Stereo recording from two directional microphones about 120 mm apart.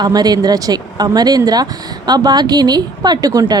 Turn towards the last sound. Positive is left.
turn(degrees=-35)  # may be behind; listen again after turning